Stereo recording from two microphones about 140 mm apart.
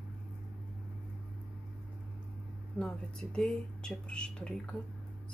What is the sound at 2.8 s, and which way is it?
Speech, 5° left (ahead or behind).